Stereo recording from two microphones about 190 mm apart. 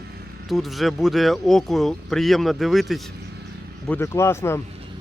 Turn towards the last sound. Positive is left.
turn(degrees=15)  # may be behind; listen again after turning